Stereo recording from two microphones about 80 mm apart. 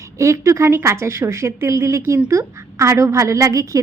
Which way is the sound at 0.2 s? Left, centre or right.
Right.